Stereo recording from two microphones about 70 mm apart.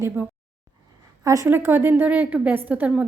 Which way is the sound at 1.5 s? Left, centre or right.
Right.